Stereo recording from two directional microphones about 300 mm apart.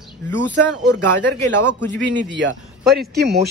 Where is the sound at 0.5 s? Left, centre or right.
Right.